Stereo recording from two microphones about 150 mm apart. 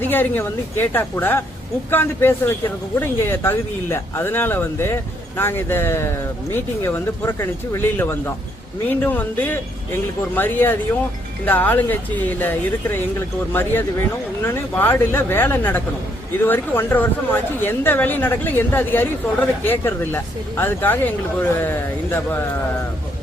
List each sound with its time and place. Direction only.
0.0 s speech: 15° left (ahead or behind)